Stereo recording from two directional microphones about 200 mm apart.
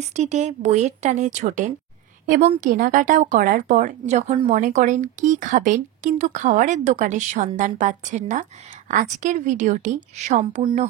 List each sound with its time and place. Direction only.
0.1 s a woman's voice: 35° right (ahead or behind)